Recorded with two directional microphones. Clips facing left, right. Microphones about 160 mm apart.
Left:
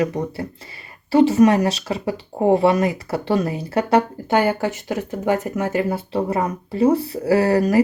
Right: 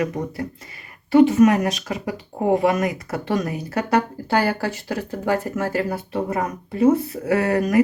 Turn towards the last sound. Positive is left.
turn(degrees=30)  # may be behind; listen again after turning